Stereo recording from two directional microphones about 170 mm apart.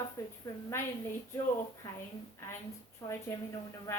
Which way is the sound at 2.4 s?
15° left (ahead or behind).